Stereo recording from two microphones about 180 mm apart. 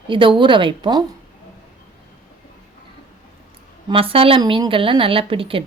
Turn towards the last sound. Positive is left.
turn(degrees=-30)  # may be behind; listen again after turning